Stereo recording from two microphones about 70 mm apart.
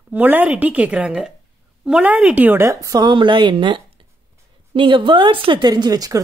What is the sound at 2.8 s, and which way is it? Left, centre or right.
Speech, right.